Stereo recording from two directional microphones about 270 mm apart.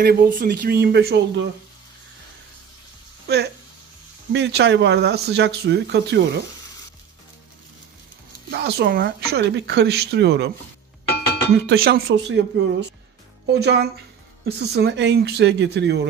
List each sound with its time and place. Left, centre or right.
0.0 s speech: right
4.3 s speech: right
8.5 s speech: right
11.5 s speech: right